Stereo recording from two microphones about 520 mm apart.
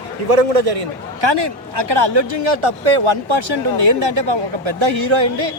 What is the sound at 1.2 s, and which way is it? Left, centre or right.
A man's voice, right.